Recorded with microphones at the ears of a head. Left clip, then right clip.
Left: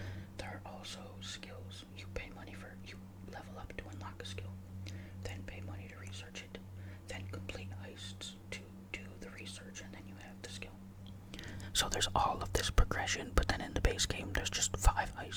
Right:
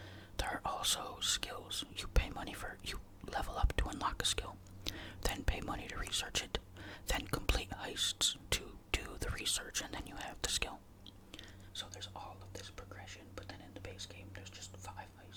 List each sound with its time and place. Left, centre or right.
0.3 s speech: right
11.7 s speech: left